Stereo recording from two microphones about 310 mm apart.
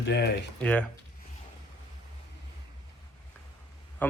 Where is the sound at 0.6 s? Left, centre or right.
Centre.